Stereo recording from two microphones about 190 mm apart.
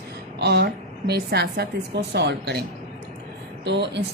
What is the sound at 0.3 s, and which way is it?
A woman's voice, 60° right (ahead or behind).